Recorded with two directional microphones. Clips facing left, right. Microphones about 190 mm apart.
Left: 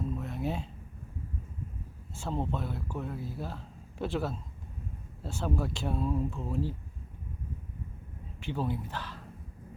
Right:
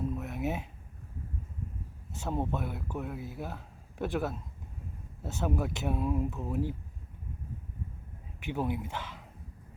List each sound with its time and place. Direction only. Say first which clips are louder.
0.2 s a sound: even; 5° right (ahead or behind)
2.1 s speech: right 1 dB; 15° right (ahead or behind)
8.4 s speech: right 1 dB; 15° right (ahead or behind)